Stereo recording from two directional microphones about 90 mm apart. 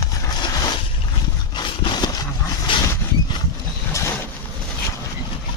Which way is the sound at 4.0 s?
35° left (ahead or behind).